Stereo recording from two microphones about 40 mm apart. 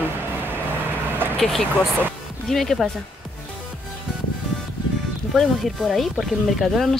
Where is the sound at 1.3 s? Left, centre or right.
Centre.